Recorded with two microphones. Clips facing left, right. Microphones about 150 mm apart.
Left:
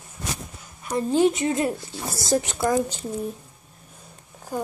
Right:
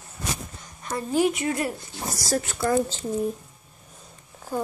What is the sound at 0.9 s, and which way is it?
Speech, 25° left (ahead or behind).